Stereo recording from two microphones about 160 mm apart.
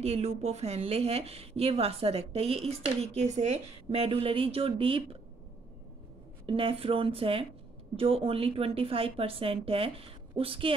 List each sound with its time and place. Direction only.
0.0 s a woman's voice: 40° right (ahead or behind)
6.4 s a woman's voice: 35° right (ahead or behind)